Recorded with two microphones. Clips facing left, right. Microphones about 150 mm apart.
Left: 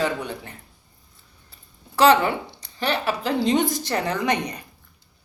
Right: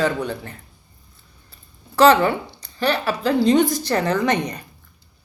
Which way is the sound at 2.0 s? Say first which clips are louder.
Right 3 dB; 15° left (ahead or behind).